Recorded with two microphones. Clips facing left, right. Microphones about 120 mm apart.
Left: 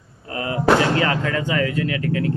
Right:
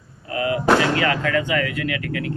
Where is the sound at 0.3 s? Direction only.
30° left (ahead or behind).